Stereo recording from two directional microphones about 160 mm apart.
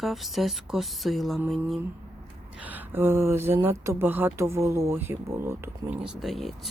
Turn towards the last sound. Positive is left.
turn(degrees=0)  # may be behind; listen again after turning